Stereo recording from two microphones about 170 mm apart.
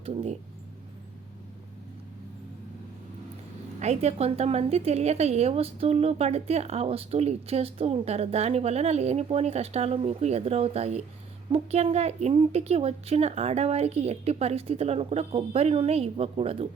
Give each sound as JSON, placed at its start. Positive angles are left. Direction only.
{"t": 0.0, "sound": "speech", "side_deg": -35}
{"t": 3.8, "sound": "a woman's voice", "side_deg": -40}